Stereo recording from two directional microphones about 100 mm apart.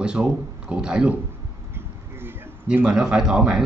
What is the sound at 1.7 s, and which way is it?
Bee, 20° right (ahead or behind).